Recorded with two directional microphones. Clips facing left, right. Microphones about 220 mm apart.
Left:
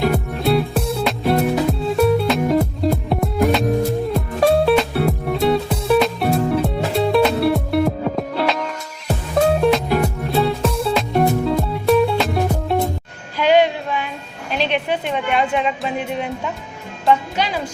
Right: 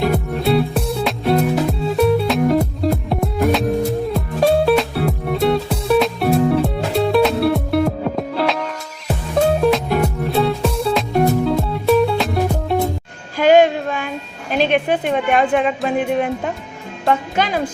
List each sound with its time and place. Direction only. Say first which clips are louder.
0.0 s music: right 1 dB; centre (ahead or behind)
13.3 s child singing: right 3 dB; 45° right (ahead or behind)
14.5 s a sound: right 4 dB; 50° right (ahead or behind)
16.0 s music: right 5 dB; 50° right (ahead or behind)